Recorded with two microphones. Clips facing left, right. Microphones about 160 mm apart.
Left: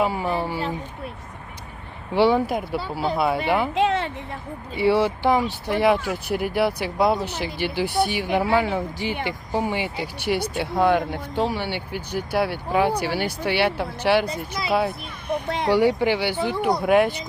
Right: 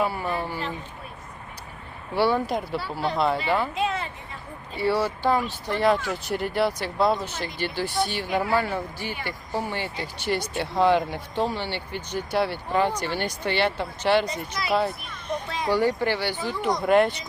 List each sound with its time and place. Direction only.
0.0 s speech: 15° left (ahead or behind)
2.1 s speech: 15° left (ahead or behind)
3.8 s a sound: 90° left
4.8 s speech: 15° left (ahead or behind)
15.4 s speech: 60° left (ahead or behind)
15.7 s speech: 15° left (ahead or behind)
16.4 s speech: 60° left (ahead or behind)
16.8 s speech: 5° left (ahead or behind)